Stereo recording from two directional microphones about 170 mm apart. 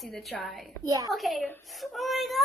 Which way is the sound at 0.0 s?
Centre (ahead or behind).